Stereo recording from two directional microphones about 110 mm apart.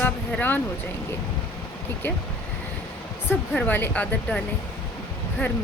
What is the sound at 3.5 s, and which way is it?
Speech, 15° left (ahead or behind).